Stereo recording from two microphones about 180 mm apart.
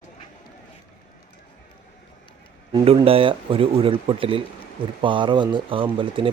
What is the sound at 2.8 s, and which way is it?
Speech, 30° right (ahead or behind).